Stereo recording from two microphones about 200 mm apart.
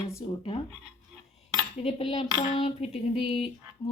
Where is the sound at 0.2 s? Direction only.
25° left (ahead or behind).